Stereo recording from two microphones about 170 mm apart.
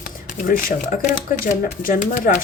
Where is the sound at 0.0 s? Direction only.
55° left (ahead or behind).